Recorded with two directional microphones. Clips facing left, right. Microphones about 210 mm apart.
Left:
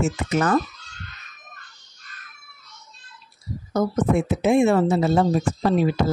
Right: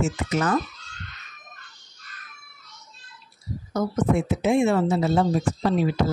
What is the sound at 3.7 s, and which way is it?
Speech, 50° left (ahead or behind).